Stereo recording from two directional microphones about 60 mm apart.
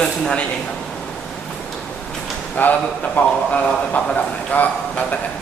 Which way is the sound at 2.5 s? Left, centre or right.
Left.